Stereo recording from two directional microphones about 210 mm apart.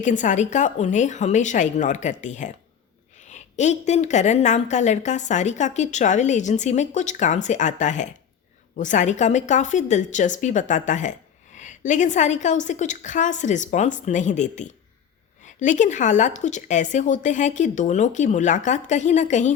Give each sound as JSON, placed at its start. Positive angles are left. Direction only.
{"t": 0.0, "sound": "a woman's voice", "side_deg": 35}